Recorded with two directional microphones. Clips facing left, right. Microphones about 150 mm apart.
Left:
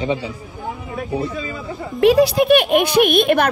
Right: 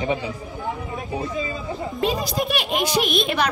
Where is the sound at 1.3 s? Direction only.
20° right (ahead or behind).